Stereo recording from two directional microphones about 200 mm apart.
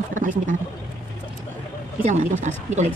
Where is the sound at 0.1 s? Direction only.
40° right (ahead or behind).